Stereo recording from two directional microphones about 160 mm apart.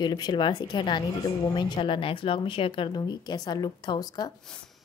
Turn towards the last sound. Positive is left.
turn(degrees=25)  # may be behind; listen again after turning